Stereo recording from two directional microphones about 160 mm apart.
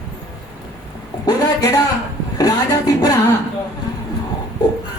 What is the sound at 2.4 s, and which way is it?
Music, 20° left (ahead or behind).